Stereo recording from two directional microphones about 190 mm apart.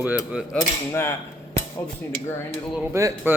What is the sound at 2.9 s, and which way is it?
Cutlery, 15° right (ahead or behind).